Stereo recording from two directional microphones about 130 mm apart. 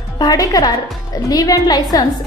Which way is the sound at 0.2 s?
30° left (ahead or behind).